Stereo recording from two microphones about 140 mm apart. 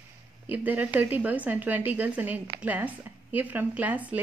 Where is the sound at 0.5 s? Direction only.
10° right (ahead or behind).